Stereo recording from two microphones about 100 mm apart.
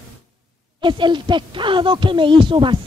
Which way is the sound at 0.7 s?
55° right (ahead or behind).